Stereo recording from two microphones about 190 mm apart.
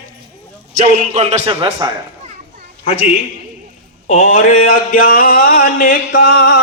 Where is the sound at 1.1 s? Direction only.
35° right (ahead or behind).